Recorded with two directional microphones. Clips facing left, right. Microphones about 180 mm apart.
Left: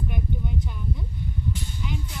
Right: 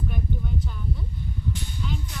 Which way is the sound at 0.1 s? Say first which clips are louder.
Even; 15° left (ahead or behind).